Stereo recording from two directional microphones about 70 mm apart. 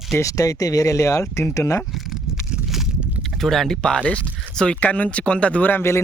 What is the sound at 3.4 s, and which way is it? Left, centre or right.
Speech, centre.